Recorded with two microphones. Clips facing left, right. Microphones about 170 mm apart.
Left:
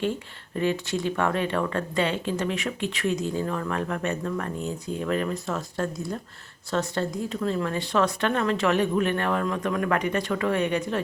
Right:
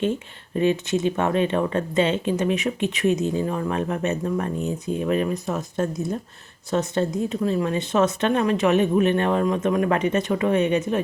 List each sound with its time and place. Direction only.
0.0 s speech: 20° right (ahead or behind)